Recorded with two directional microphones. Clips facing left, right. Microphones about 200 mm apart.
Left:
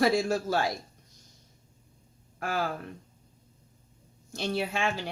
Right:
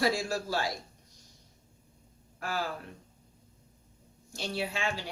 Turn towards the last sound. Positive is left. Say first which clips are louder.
# left 4 dB
turn(degrees=50)  # may be behind; listen again after turning